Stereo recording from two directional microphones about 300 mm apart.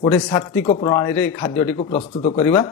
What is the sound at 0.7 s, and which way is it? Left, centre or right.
Speech, left.